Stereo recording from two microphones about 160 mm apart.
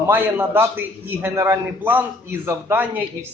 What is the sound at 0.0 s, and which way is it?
A man's voice, 15° right (ahead or behind).